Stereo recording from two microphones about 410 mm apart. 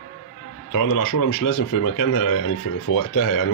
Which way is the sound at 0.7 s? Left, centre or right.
Left.